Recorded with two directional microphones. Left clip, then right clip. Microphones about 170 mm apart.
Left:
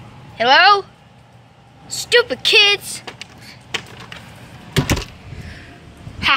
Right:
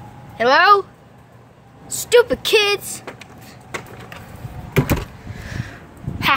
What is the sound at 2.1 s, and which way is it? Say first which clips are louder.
Speech: left 1 dB; 10° right (ahead or behind).